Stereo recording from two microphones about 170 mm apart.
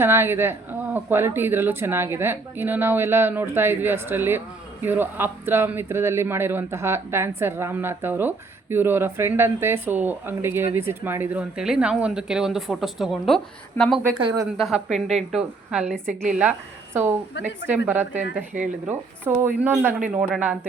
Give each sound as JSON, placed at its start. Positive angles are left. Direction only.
{"t": 0.0, "sound": "a woman's voice", "side_deg": -15}
{"t": 14.2, "sound": "speech", "side_deg": -30}
{"t": 14.6, "sound": "a woman's voice", "side_deg": 0}
{"t": 17.4, "sound": "speech", "side_deg": 90}
{"t": 17.7, "sound": "a woman's voice", "side_deg": -10}